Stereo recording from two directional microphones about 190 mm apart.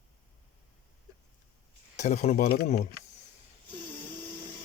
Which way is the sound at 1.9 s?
40° left (ahead or behind).